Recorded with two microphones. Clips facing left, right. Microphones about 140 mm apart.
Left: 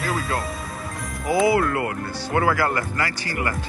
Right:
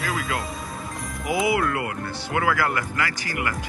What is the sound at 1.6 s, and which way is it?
Speech, 30° left (ahead or behind).